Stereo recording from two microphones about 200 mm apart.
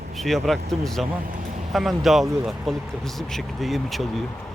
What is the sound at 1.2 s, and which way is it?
Vehicle, 45° right (ahead or behind).